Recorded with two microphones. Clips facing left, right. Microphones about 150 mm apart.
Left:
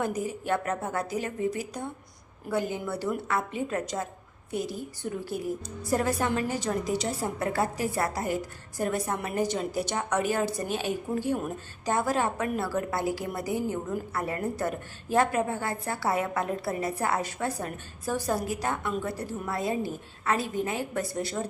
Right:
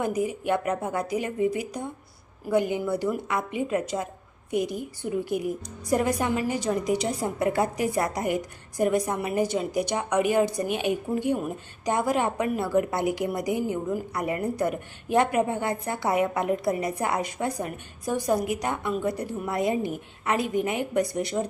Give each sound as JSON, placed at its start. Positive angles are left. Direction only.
{"t": 0.0, "sound": "a woman's voice", "side_deg": -15}